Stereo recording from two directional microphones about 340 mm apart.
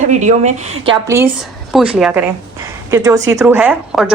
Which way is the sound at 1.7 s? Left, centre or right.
Centre.